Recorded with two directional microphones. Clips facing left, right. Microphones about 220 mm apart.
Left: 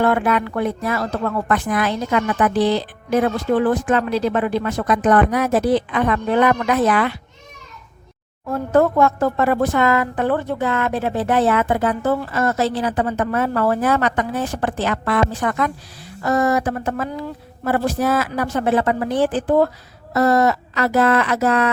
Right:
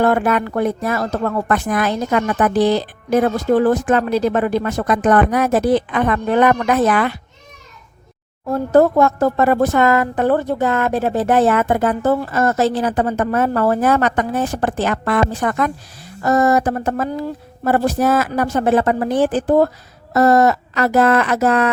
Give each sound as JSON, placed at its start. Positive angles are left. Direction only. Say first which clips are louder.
{"t": 0.0, "sound": "speech", "louder": "right 2 dB", "side_deg": -45}
{"t": 8.4, "sound": "speech", "louder": "right 3 dB", "side_deg": -35}